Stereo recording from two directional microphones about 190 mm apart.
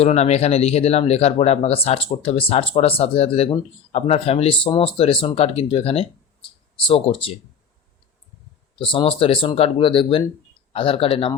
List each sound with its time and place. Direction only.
0.0 s speech: 35° left (ahead or behind)
8.8 s speech: 25° left (ahead or behind)